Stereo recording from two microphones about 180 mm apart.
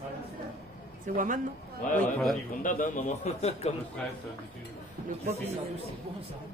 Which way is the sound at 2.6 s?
50° left (ahead or behind).